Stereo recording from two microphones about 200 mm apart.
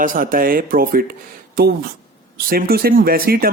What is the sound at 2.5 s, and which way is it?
Speech, 50° right (ahead or behind).